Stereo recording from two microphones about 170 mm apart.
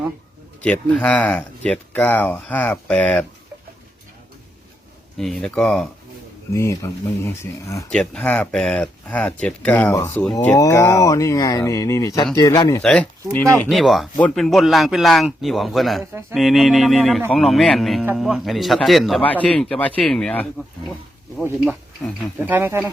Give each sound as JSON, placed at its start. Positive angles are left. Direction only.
{"t": 0.6, "sound": "speech", "side_deg": 10}
{"t": 5.1, "sound": "speech", "side_deg": 0}
{"t": 6.5, "sound": "speech", "side_deg": 15}
{"t": 7.9, "sound": "speech", "side_deg": 5}
{"t": 12.8, "sound": "speech", "side_deg": 5}
{"t": 22.4, "sound": "speech", "side_deg": -10}